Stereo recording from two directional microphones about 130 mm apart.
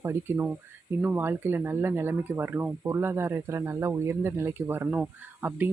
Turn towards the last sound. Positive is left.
turn(degrees=-15)  # may be behind; listen again after turning